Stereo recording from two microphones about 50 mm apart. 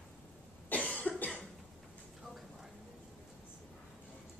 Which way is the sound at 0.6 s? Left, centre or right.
Left.